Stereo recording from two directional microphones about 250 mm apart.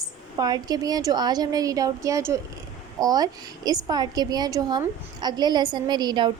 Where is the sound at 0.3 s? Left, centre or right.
Centre.